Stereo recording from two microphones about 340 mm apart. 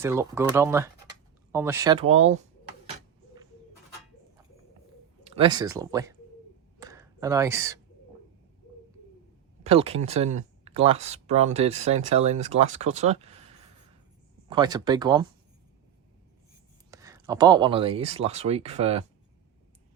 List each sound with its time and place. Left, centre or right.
0.0 s speech: centre
5.2 s speech: centre
6.7 s a sound: centre
9.6 s speech: centre
14.4 s speech: centre
16.9 s speech: centre